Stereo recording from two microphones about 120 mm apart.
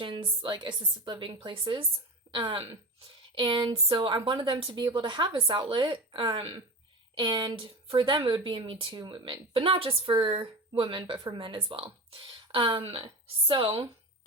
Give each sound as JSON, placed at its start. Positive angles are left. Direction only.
{"t": 0.0, "sound": "speech", "side_deg": -45}